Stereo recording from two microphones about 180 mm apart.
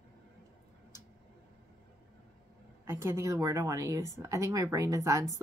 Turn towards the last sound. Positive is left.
turn(degrees=-15)  # may be behind; listen again after turning